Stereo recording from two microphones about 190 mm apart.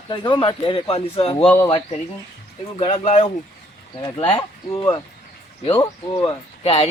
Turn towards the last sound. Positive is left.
turn(degrees=30)  # may be behind; listen again after turning